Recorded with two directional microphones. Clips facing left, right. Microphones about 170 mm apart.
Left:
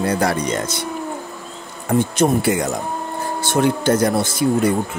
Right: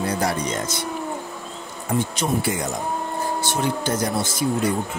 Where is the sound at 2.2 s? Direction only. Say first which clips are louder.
Left 7 dB; 65° left (ahead or behind).